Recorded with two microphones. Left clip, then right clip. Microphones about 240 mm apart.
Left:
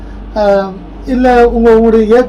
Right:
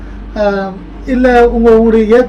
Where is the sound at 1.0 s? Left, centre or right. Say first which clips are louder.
Even; centre.